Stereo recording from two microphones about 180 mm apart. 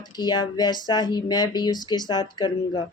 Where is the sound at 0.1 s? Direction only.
25° left (ahead or behind).